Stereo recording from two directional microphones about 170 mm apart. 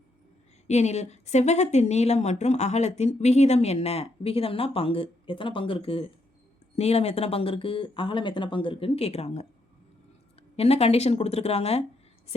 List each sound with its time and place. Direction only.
0.7 s a woman's voice: 40° left (ahead or behind)
10.6 s a woman's voice: 35° left (ahead or behind)